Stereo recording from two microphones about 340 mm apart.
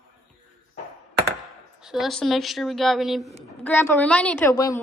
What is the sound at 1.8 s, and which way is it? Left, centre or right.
A woman's voice, centre.